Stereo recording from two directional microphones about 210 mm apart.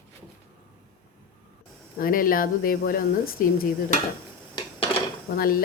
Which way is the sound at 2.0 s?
40° left (ahead or behind).